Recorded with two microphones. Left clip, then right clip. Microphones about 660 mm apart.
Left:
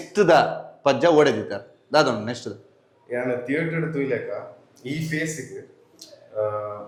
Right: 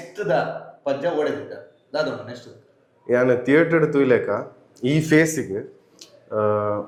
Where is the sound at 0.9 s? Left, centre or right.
Left.